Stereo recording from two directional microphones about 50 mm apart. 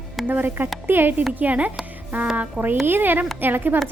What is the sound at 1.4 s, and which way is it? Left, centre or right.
A woman's voice, right.